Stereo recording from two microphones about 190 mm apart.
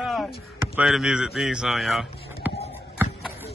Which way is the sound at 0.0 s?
Centre (ahead or behind).